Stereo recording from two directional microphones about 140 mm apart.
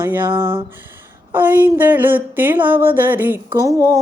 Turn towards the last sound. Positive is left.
turn(degrees=-20)  # may be behind; listen again after turning